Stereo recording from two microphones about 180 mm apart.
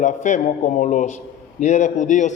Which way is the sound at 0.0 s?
45° left (ahead or behind).